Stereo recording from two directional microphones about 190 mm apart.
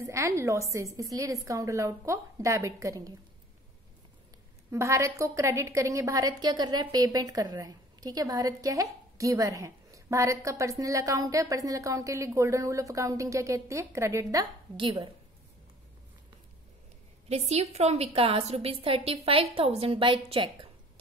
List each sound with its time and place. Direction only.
0.0 s a woman's voice: 15° right (ahead or behind)
4.6 s a woman's voice: 15° right (ahead or behind)
17.3 s a woman's voice: 35° right (ahead or behind)